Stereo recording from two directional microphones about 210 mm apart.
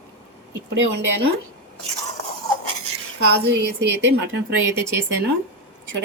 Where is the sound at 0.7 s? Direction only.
60° right (ahead or behind).